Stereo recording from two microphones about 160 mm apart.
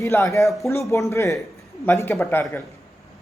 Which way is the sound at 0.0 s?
15° left (ahead or behind).